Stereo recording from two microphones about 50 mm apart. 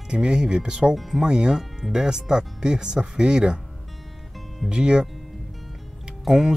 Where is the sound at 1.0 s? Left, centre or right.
Centre.